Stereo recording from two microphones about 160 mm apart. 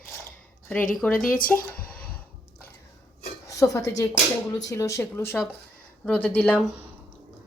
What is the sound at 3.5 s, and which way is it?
A woman's voice, 20° left (ahead or behind).